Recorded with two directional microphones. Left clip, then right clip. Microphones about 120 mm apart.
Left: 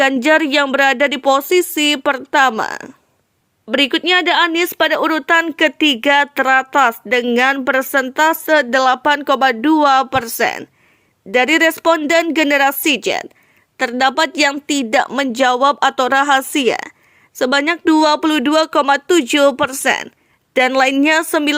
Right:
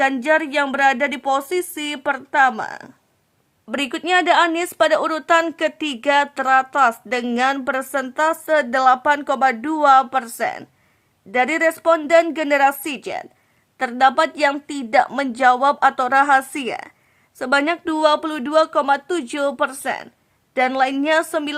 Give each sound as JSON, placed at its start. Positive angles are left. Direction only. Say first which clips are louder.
{"t": 0.2, "sound": "speech", "louder": "left 5 dB", "side_deg": 40}
{"t": 3.7, "sound": "speech", "louder": "left 6 dB", "side_deg": 20}